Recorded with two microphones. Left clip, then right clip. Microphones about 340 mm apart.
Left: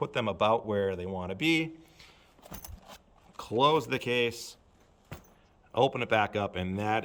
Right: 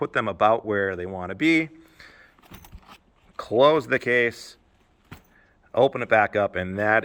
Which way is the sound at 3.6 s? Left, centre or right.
Centre.